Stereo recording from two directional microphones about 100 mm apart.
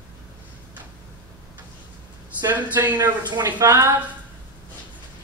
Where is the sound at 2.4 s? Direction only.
15° right (ahead or behind).